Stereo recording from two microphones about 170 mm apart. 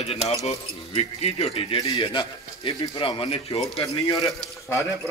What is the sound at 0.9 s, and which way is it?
Speech, 35° left (ahead or behind).